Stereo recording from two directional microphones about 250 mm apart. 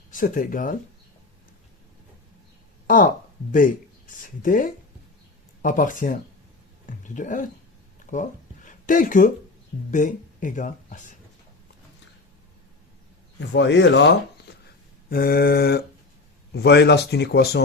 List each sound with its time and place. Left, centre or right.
0.1 s speech: left
2.8 s a woman's voice: left
13.5 s speech: left